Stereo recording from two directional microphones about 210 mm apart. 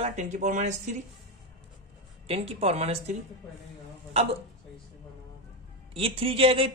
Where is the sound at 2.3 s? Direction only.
30° right (ahead or behind).